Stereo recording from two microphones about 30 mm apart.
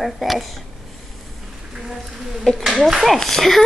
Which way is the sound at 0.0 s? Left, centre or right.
Centre.